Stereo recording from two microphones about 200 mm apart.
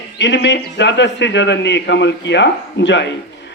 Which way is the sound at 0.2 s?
60° left (ahead or behind).